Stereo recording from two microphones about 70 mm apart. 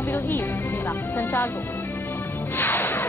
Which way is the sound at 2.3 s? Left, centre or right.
Left.